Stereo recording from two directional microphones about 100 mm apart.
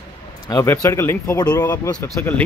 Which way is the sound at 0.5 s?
30° left (ahead or behind).